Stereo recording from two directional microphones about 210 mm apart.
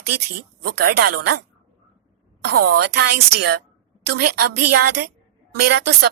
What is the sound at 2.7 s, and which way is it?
A woman's voice, 50° right (ahead or behind).